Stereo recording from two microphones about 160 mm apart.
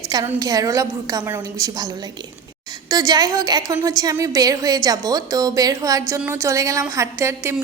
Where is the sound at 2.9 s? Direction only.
25° right (ahead or behind).